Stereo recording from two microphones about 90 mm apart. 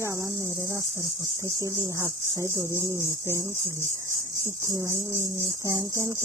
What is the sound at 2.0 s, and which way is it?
Speech, 35° right (ahead or behind).